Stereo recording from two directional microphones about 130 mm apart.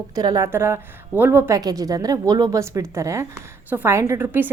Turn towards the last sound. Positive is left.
turn(degrees=-15)  # may be behind; listen again after turning